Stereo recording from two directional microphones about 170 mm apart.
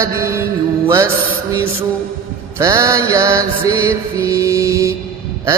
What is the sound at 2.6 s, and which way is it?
Mantra, 20° right (ahead or behind).